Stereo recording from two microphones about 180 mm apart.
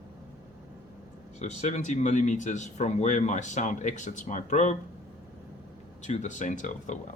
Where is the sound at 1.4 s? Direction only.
40° left (ahead or behind).